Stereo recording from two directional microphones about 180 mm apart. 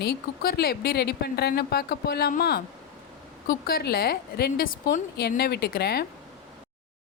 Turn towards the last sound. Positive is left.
turn(degrees=60)  # may be behind; listen again after turning